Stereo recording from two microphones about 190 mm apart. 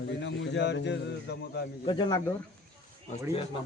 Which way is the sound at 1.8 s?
25° left (ahead or behind).